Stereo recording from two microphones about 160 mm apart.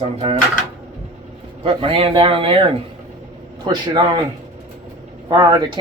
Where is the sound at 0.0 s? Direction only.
35° right (ahead or behind).